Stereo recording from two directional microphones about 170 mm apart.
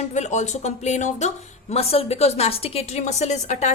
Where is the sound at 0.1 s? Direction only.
45° left (ahead or behind).